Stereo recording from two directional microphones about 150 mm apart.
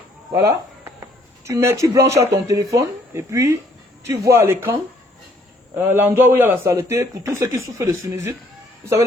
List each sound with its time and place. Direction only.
0.3 s a sound: 20° right (ahead or behind)
1.5 s a man's voice: 20° right (ahead or behind)
5.7 s a man's voice: 15° right (ahead or behind)